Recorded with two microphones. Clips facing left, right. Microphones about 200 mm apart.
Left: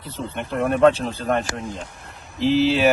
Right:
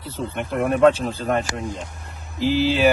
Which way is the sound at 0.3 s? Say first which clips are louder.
Even; centre (ahead or behind).